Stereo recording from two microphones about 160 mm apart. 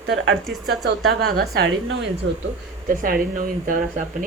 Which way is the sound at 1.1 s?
80° right.